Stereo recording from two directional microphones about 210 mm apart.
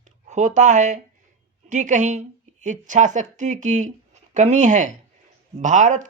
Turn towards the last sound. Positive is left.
turn(degrees=-35)  # may be behind; listen again after turning